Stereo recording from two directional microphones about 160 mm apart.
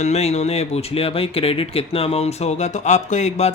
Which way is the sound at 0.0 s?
45° left (ahead or behind).